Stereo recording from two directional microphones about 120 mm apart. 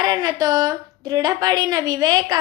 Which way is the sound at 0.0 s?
30° right (ahead or behind).